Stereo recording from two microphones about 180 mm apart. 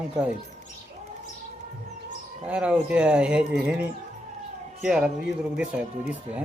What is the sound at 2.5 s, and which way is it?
A woman's voice, 5° right (ahead or behind).